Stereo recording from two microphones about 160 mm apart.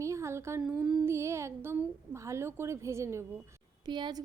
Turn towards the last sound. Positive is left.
turn(degrees=-30)  # may be behind; listen again after turning